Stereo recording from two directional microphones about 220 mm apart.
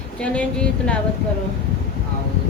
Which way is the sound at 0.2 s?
5° left (ahead or behind).